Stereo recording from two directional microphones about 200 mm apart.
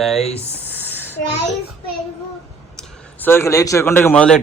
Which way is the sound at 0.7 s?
10° left (ahead or behind).